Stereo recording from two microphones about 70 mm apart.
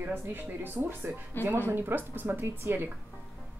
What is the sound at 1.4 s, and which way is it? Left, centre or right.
Speech, left.